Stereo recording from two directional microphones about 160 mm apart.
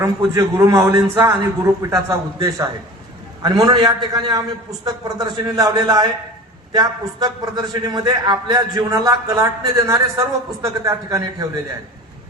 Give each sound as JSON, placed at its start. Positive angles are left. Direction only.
{"t": 0.0, "sound": "a man's voice", "side_deg": -20}